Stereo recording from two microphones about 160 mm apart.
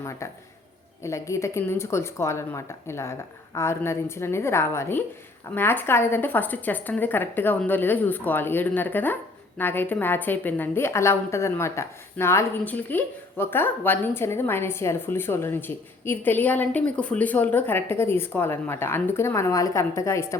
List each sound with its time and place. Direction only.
0.2 s a man's voice: 20° left (ahead or behind)